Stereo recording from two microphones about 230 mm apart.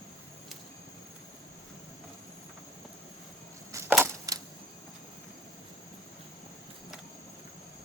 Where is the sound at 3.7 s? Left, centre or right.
Centre.